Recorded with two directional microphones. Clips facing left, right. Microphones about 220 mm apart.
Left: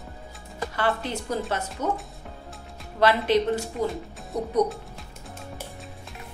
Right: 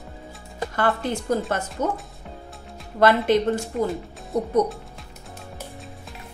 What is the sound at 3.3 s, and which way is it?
Speech, 50° right (ahead or behind).